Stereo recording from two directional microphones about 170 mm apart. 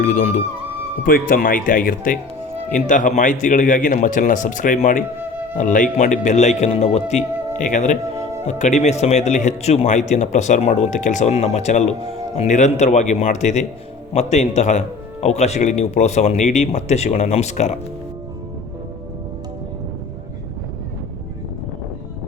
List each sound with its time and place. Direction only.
0.0 s speech: 45° left (ahead or behind)